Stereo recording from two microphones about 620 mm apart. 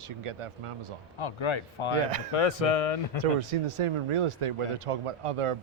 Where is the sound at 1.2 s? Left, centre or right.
Left.